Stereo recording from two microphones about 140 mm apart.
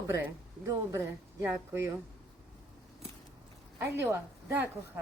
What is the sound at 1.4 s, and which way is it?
Speech, 15° right (ahead or behind).